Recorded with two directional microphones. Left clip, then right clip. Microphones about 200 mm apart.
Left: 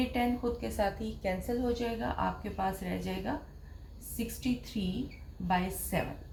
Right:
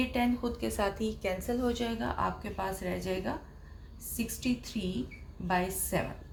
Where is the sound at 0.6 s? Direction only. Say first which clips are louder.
Right 4 dB; 45° right (ahead or behind).